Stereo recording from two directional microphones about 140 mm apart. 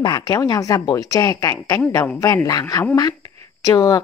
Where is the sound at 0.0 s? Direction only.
30° left (ahead or behind).